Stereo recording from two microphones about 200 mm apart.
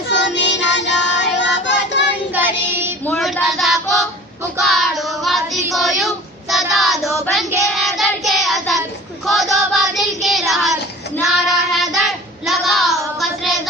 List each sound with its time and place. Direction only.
0.1 s child singing: 60° left (ahead or behind)
2.3 s child singing: 10° right (ahead or behind)
3.1 s child singing: 5° left (ahead or behind)